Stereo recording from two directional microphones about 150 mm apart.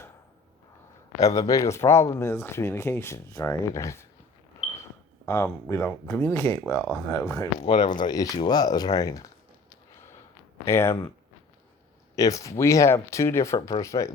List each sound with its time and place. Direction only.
1.2 s speech: 20° left (ahead or behind)
5.2 s speech: 20° left (ahead or behind)
7.9 s speech: 30° left (ahead or behind)
10.7 s speech: 15° left (ahead or behind)
12.1 s speech: 20° left (ahead or behind)